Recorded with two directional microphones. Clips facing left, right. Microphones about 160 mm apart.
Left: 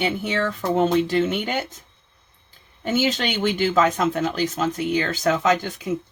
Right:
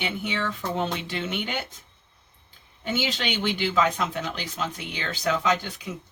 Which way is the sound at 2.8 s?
45° left (ahead or behind).